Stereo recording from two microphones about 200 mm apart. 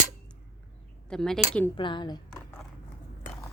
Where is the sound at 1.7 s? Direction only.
25° left (ahead or behind).